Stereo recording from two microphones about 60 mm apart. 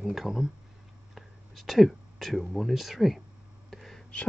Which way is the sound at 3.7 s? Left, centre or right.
Centre.